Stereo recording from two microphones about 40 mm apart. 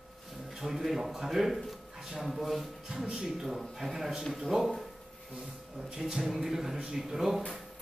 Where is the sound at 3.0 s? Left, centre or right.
Right.